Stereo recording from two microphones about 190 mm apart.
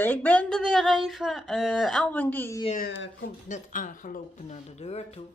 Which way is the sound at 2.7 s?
50° left (ahead or behind).